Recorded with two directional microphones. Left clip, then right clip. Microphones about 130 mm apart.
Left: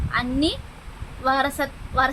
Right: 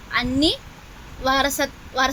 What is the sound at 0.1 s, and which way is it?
A child's voice, 25° right (ahead or behind).